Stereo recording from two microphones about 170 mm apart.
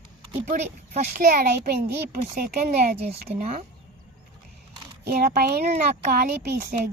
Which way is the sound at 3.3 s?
40° right (ahead or behind).